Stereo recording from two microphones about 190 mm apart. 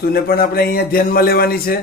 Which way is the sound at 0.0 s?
50° left (ahead or behind).